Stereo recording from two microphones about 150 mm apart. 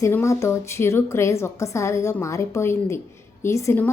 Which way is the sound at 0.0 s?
20° left (ahead or behind).